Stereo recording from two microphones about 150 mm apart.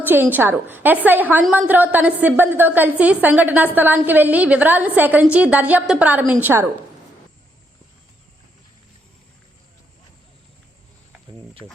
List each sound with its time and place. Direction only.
0.0 s a woman's voice: 15° right (ahead or behind)
11.6 s speech: 25° right (ahead or behind)